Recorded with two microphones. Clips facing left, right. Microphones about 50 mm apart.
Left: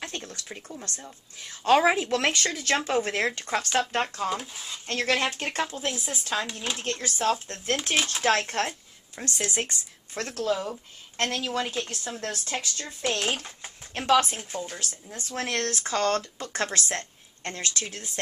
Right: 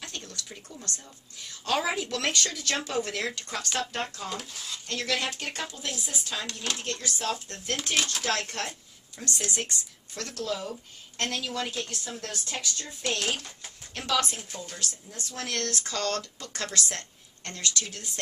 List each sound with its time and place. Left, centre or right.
0.0 s a sound: left
0.7 s speech: left
1.6 s speech: left
4.3 s speech: centre
4.8 s speech: left
7.9 s speech: centre
8.2 s speech: left; by 11.9 s centre
12.2 s speech: left